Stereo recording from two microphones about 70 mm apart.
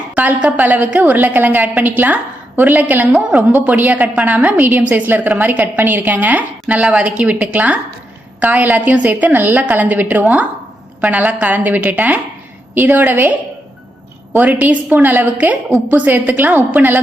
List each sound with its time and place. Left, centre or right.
0.1 s a sound: right
0.4 s a woman's voice: right
14.3 s a woman's voice: right